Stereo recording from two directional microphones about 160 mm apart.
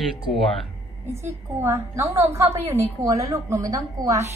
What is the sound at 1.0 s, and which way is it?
A woman's voice, 15° right (ahead or behind).